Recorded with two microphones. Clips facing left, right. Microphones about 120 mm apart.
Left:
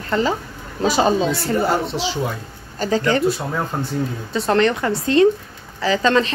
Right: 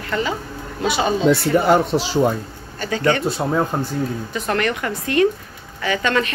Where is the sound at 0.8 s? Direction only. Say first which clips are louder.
Left 3 dB; 40° left (ahead or behind).